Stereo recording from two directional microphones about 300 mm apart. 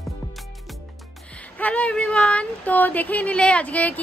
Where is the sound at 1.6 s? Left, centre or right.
Centre.